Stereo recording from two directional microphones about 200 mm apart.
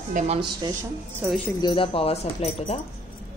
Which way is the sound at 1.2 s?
5° right (ahead or behind).